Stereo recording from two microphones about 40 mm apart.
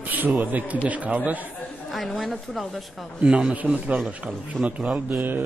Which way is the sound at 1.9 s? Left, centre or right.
Centre.